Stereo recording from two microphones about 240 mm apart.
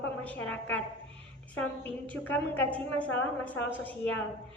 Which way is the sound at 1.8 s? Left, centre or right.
Centre.